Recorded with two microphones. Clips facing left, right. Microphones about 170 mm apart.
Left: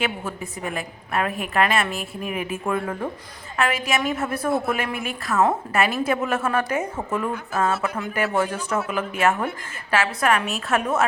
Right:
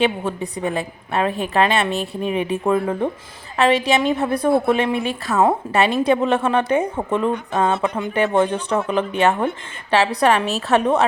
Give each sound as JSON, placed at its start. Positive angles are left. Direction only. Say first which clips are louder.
{"t": 0.0, "sound": "a woman's voice", "louder": "right 7 dB", "side_deg": -30}